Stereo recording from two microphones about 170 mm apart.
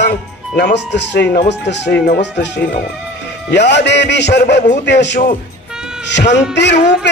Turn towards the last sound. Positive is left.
turn(degrees=90)